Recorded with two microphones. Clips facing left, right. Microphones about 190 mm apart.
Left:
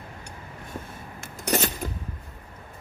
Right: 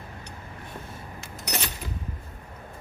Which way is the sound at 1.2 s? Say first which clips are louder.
Left 8 dB; 50° left (ahead or behind).